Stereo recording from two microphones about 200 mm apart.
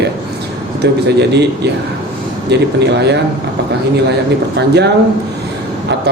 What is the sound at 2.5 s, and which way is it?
Speech, 55° right (ahead or behind).